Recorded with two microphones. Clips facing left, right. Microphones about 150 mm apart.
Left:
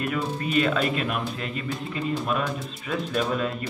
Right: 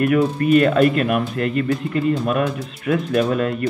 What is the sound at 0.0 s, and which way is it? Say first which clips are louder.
Speech: right 11 dB; 60° right (ahead or behind).